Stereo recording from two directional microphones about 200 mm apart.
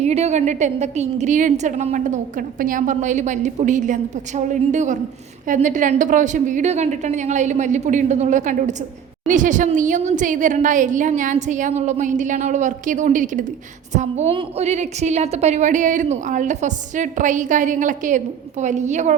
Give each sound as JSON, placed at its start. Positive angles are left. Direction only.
{"t": 0.0, "sound": "a woman's voice", "side_deg": -30}